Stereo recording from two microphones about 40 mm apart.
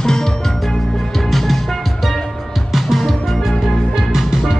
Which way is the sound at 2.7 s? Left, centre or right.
Centre.